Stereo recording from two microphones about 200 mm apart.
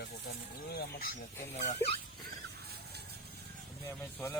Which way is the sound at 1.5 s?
35° left (ahead or behind).